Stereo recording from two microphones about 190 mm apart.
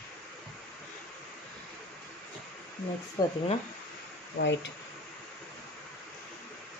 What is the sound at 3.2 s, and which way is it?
Speech, 20° left (ahead or behind).